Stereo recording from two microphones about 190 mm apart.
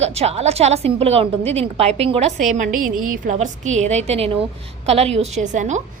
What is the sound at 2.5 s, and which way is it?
A woman's voice, 45° right (ahead or behind).